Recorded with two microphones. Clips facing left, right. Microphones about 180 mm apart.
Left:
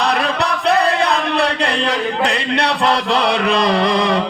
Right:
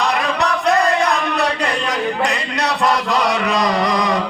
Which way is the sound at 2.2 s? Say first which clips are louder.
Left 2 dB; 30° left (ahead or behind).